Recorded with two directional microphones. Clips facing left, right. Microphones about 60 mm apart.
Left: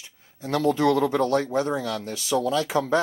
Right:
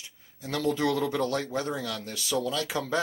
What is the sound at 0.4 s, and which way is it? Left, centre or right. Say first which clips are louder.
Speech: left 5 dB; left.